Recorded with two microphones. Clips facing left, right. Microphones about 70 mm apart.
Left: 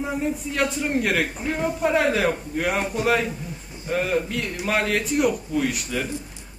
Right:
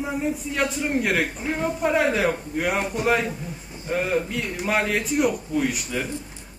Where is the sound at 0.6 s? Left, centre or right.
Centre.